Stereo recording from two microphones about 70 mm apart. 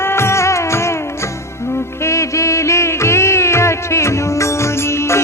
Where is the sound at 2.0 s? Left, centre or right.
Left.